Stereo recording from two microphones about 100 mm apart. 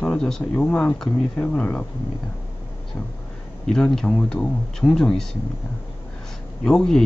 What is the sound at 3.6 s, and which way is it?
Speech, 5° left (ahead or behind).